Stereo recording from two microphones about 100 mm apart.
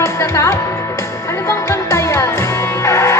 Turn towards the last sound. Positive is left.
turn(degrees=30)  # may be behind; listen again after turning